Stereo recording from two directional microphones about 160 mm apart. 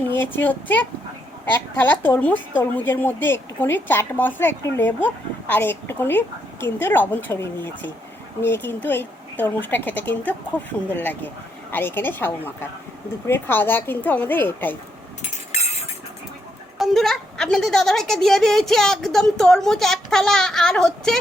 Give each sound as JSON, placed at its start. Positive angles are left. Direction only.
{"t": 0.2, "sound": "a woman's voice", "side_deg": 10}
{"t": 15.2, "sound": "a sound", "side_deg": 45}
{"t": 16.7, "sound": "a woman's voice", "side_deg": 0}